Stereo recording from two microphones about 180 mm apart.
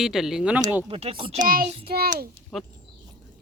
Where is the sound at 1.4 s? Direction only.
50° right (ahead or behind).